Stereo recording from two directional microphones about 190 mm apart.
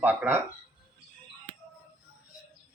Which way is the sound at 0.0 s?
10° right (ahead or behind).